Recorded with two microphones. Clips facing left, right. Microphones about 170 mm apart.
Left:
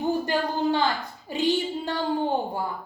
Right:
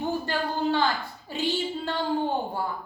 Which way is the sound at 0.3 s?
15° left (ahead or behind).